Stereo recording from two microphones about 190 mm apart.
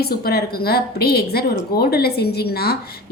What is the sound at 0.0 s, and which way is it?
A woman's voice, 55° left (ahead or behind).